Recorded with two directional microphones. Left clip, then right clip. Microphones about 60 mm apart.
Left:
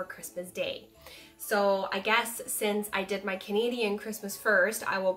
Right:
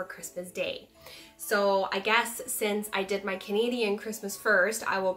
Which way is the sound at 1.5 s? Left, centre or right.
Right.